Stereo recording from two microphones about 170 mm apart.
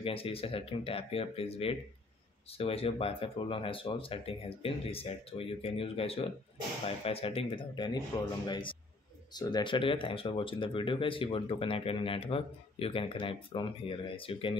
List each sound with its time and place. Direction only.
0.0 s speech: 35° left (ahead or behind)
9.3 s speech: 25° left (ahead or behind)